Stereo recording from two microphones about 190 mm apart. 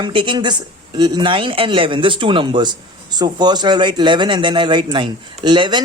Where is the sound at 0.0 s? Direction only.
25° right (ahead or behind).